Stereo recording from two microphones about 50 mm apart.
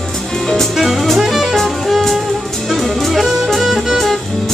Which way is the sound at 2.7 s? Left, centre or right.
Centre.